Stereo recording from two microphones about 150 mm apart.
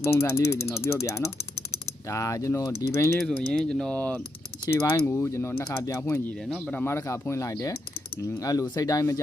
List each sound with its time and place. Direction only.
0.1 s speech: 20° left (ahead or behind)
3.2 s speech: 5° left (ahead or behind)
6.4 s speech: 5° left (ahead or behind); by 9.2 s 20° left (ahead or behind)